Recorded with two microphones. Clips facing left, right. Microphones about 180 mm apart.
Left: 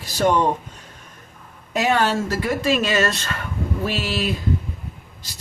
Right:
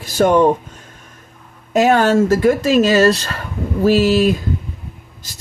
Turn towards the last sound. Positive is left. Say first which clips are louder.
# right 12 dB
turn(degrees=-40)  # may be behind; listen again after turning